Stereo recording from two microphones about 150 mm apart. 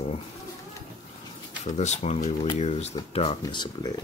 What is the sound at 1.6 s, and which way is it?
Speech, 50° left (ahead or behind).